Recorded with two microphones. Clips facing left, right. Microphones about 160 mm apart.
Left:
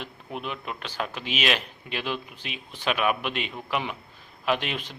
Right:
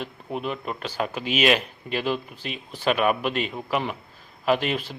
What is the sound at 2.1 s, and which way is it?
Speech, 40° right (ahead or behind).